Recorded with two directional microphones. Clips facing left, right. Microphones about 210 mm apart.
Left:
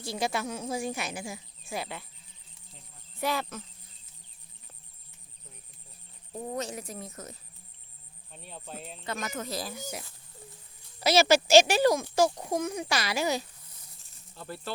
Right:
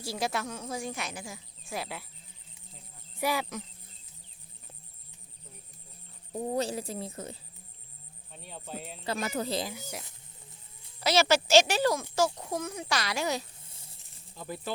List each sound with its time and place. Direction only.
0.0 s speech: 5° right (ahead or behind)
0.4 s speech: 10° left (ahead or behind)
1.7 s speech: 5° right (ahead or behind)
3.2 s speech: 10° right (ahead or behind)
6.5 s speech: 30° right (ahead or behind)
8.3 s speech: centre (ahead or behind)
9.0 s speech: 30° right (ahead or behind)
11.0 s speech: 10° left (ahead or behind)
13.6 s a sound: 25° right (ahead or behind)
14.3 s speech: 15° right (ahead or behind)